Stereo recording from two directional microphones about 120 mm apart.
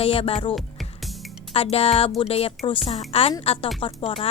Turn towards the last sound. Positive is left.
turn(degrees=50)  # may be behind; listen again after turning